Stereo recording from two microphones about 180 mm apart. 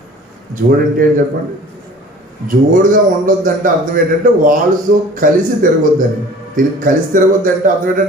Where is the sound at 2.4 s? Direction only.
50° right (ahead or behind).